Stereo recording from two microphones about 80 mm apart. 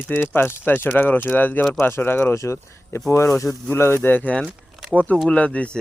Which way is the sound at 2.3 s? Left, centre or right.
Left.